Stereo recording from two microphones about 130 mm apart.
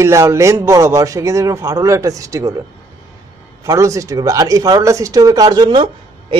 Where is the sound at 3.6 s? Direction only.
25° right (ahead or behind).